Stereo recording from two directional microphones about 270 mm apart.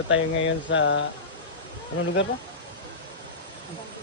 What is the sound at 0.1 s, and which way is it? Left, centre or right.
Speech, left.